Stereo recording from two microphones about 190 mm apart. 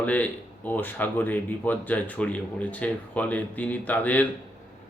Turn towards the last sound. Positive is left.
turn(degrees=10)  # may be behind; listen again after turning